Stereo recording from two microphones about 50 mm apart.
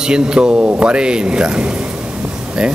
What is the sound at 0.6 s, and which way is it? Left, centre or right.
Speech, right.